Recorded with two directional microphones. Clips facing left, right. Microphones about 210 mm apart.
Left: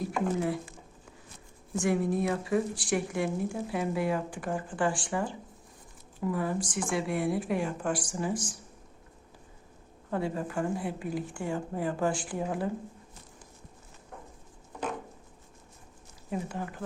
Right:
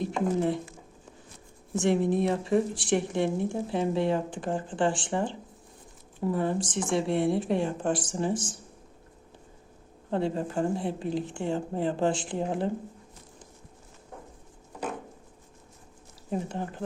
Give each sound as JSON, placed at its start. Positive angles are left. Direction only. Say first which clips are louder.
{"t": 0.0, "sound": "speech", "louder": "right 3 dB", "side_deg": -25}
{"t": 1.8, "sound": "speech", "louder": "right 3 dB", "side_deg": -25}
{"t": 10.1, "sound": "speech", "louder": "right 3 dB", "side_deg": -25}
{"t": 16.5, "sound": "speech", "louder": "right 3 dB", "side_deg": -25}